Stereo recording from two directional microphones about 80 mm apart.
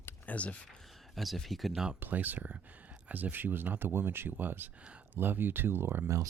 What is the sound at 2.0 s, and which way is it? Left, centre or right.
Speech, right.